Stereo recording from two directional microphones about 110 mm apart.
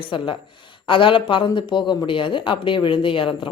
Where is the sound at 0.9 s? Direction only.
50° left (ahead or behind).